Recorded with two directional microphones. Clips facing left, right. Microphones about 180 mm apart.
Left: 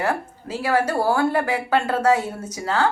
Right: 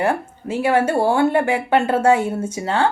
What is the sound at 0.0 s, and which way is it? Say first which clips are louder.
Speech: right 4 dB; 25° right (ahead or behind).